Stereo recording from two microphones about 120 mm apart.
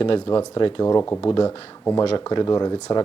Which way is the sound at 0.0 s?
45° left (ahead or behind).